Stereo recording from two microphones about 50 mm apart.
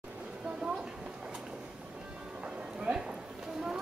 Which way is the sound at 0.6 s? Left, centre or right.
Centre.